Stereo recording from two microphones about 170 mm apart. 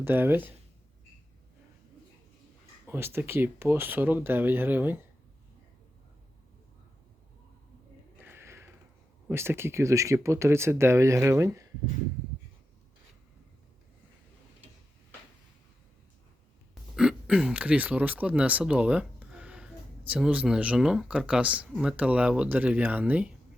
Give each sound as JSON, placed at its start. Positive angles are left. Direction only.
{"t": 0.0, "sound": "speech", "side_deg": -10}
{"t": 2.8, "sound": "speech", "side_deg": -15}
{"t": 8.2, "sound": "a sound", "side_deg": -15}
{"t": 9.3, "sound": "speech", "side_deg": -15}
{"t": 16.9, "sound": "speech", "side_deg": -5}